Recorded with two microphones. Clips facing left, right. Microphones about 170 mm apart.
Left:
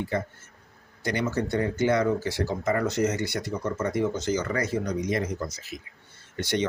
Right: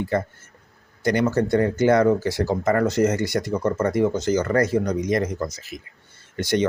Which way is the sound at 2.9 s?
60° right (ahead or behind).